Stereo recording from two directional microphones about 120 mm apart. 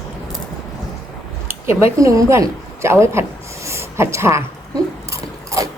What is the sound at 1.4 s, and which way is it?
Speech, 20° right (ahead or behind).